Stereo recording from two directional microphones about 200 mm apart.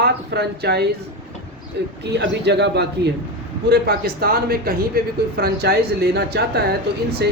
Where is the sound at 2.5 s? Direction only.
55° right (ahead or behind).